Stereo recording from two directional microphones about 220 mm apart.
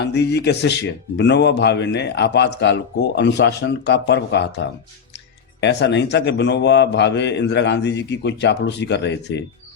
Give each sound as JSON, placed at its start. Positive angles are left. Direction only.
{"t": 0.0, "sound": "a man's voice", "side_deg": 50}
{"t": 5.5, "sound": "a man's voice", "side_deg": 50}